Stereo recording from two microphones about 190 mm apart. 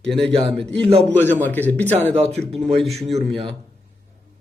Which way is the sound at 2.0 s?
5° left (ahead or behind).